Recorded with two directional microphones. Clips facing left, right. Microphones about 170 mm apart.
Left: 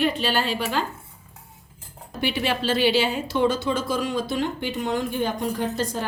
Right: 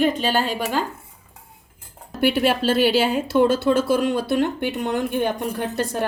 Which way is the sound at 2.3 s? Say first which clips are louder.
Right 3 dB; 50° right (ahead or behind).